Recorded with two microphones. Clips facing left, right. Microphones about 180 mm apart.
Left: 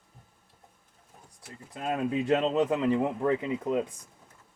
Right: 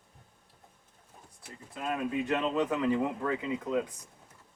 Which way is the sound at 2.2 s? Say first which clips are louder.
Left 6 dB; 30° left (ahead or behind).